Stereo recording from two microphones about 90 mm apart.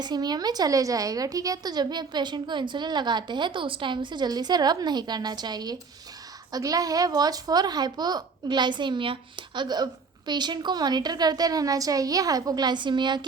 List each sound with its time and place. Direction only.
0.0 s a woman's voice: 50° right (ahead or behind)